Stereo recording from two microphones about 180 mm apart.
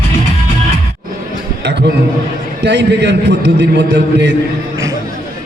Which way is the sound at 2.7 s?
75° right (ahead or behind).